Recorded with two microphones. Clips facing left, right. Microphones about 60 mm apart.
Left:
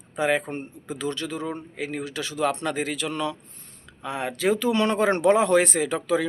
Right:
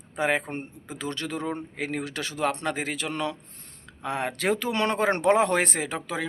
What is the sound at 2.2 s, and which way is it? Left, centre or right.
Speech, right.